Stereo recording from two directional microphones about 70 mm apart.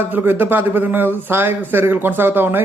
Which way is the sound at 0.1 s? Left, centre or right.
Right.